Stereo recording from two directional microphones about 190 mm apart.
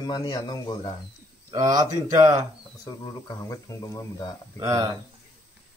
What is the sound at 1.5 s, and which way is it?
Speech, 20° right (ahead or behind).